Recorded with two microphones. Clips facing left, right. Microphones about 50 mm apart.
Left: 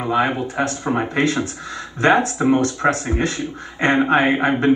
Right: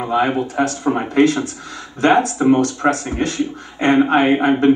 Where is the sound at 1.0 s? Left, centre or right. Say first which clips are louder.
Right 5 dB; left.